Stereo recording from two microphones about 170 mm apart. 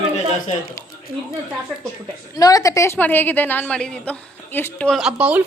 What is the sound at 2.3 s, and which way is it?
A woman's voice, 20° left (ahead or behind).